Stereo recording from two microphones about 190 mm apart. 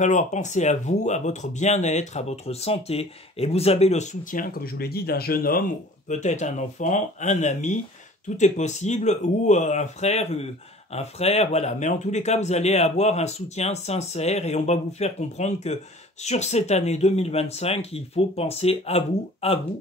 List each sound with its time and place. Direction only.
0.0 s speech: 40° left (ahead or behind)